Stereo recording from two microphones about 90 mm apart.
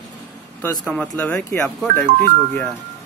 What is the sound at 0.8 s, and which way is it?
Speech, 15° left (ahead or behind).